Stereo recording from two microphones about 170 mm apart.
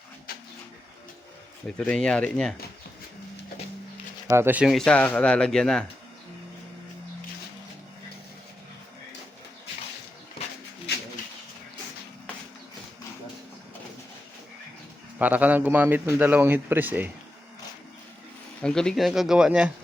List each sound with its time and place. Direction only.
0.3 s pigeon: 60° left (ahead or behind)
1.6 s speech: 5° left (ahead or behind)
4.3 s a man's voice: 15° right (ahead or behind)
4.9 s speech: 10° left (ahead or behind)
10.9 s pigeon: 75° left (ahead or behind)
15.2 s a man's voice: 10° right (ahead or behind)
18.6 s speech: 5° left (ahead or behind)